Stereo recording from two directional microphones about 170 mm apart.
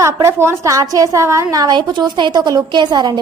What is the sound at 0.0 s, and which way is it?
A woman's voice, 15° right (ahead or behind).